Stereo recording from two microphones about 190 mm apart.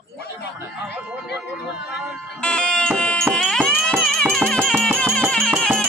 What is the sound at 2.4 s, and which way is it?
Music, 5° left (ahead or behind).